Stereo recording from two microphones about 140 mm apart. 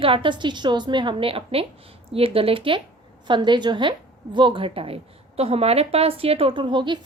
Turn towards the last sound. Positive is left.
turn(degrees=-35)  # may be behind; listen again after turning